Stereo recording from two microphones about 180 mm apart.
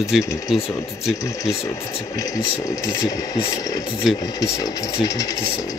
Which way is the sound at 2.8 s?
20° left (ahead or behind).